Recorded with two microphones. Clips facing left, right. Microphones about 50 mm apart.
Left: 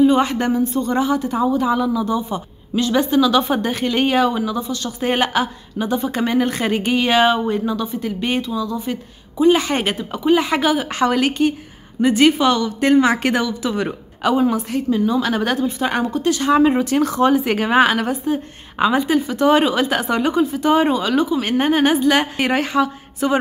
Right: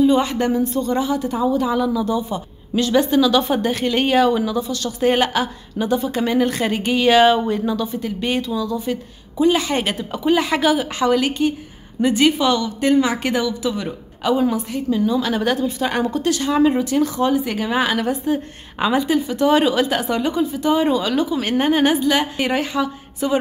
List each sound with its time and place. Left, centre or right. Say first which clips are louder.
0.0 s a woman's voice: left 1 dB; left
2.7 s a woman's voice: even; centre; by 8.5 s left
8.5 s a woman's voice: even; centre
9.6 s a woman's voice: left 1 dB; left
9.9 s a woman's voice: left 3 dB; centre
10.9 s speech: even; left
12.0 s a woman's voice: left 2 dB; left
15.6 s a woman's voice: left 1 dB; left
16.8 s speech: left 2 dB; left
18.2 s a woman's voice: even; centre
18.9 s a woman's voice: left 1 dB; left
22.0 s a woman's voice: left 2 dB; left